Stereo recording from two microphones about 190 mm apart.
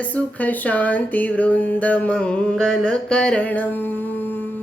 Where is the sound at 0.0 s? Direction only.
10° left (ahead or behind).